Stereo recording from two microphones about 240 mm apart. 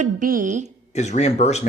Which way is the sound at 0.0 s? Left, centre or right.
Right.